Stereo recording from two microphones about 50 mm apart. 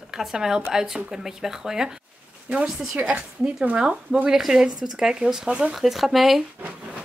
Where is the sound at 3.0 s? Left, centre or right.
Right.